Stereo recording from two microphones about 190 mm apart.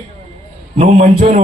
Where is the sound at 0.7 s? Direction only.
35° right (ahead or behind).